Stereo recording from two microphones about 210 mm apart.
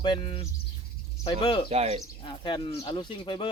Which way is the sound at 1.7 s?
30° right (ahead or behind).